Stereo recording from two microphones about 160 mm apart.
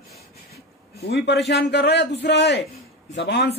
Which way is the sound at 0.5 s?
85° left.